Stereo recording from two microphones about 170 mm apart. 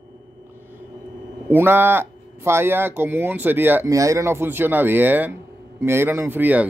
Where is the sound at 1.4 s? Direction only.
10° right (ahead or behind).